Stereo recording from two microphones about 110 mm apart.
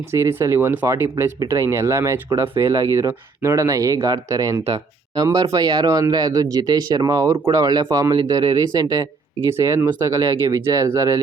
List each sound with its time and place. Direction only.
0.1 s speech: 25° right (ahead or behind)